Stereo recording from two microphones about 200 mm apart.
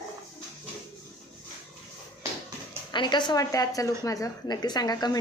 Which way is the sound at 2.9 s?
20° left (ahead or behind).